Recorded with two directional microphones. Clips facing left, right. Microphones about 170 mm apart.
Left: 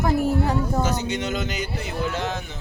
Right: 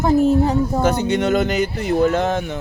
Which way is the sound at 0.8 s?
55° right (ahead or behind).